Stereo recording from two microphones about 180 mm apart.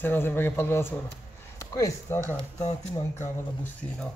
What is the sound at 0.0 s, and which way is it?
A man's voice, 10° left (ahead or behind).